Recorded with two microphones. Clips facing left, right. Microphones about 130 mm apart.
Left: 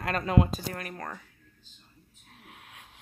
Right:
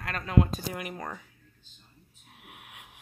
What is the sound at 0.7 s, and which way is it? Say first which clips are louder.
Speech: right 1 dB; 15° right (ahead or behind).